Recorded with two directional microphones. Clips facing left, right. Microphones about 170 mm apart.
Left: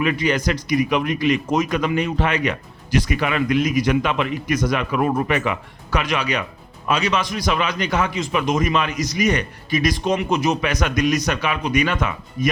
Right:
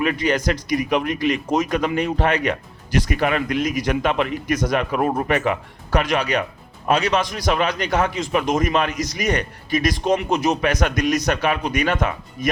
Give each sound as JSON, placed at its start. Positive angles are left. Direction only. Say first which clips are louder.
{"t": 0.0, "sound": "a man's voice", "louder": "even", "side_deg": -40}